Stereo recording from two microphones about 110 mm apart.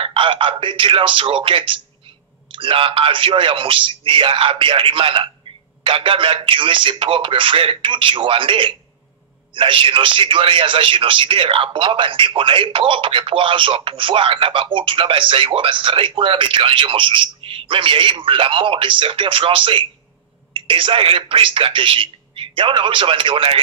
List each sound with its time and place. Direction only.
0.0 s a man's voice: 50° right (ahead or behind)